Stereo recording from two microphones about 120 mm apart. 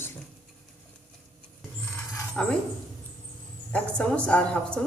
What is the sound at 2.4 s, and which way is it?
Speech, 10° left (ahead or behind).